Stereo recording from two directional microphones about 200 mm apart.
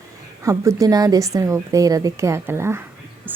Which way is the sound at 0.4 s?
15° right (ahead or behind).